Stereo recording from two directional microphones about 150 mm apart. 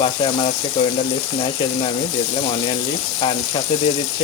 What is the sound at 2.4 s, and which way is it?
Speech, 40° left (ahead or behind).